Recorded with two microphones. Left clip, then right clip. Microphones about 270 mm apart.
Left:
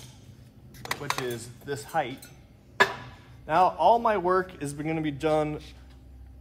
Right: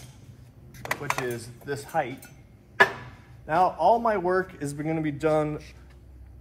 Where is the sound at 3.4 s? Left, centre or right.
Left.